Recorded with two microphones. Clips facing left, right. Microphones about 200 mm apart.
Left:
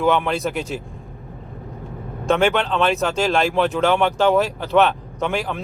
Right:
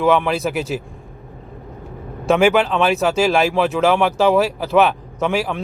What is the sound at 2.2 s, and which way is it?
Speech, centre (ahead or behind).